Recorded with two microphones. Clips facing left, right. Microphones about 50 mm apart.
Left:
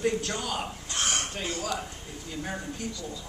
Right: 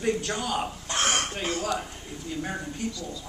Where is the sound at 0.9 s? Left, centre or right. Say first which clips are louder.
Right 5 dB; right.